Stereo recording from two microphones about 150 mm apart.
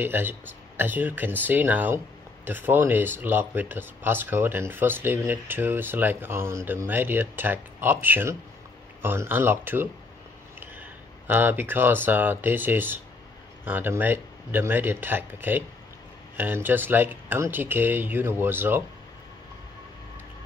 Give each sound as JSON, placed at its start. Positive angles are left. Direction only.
{"t": 0.0, "sound": "speech", "side_deg": -15}